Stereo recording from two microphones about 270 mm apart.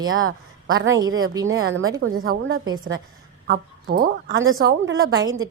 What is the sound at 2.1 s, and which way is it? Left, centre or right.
Speech, right.